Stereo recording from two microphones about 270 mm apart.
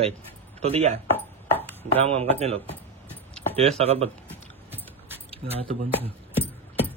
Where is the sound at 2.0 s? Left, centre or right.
Right.